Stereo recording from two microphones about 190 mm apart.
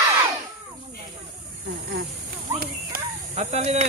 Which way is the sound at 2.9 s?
50° right (ahead or behind).